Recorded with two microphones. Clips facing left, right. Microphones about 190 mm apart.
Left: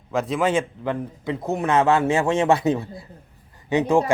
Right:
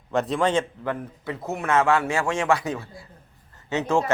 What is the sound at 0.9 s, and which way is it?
A man's voice, 15° left (ahead or behind).